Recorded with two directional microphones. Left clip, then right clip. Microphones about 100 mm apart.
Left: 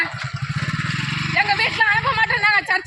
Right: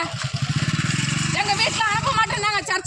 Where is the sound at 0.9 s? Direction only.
85° right.